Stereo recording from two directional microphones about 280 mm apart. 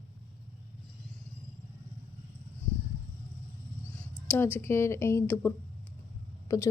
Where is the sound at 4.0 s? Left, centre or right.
Centre.